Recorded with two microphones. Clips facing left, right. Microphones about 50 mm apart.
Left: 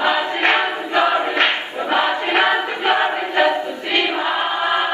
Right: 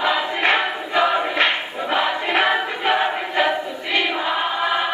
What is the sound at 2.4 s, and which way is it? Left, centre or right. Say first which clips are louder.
Choir: left 2 dB; centre.